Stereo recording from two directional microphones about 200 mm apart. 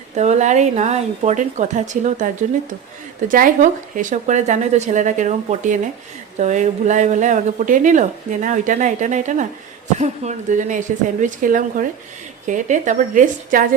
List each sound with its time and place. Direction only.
0.2 s a woman's voice: 35° right (ahead or behind)